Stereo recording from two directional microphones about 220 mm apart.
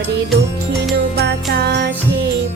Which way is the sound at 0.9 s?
50° right (ahead or behind).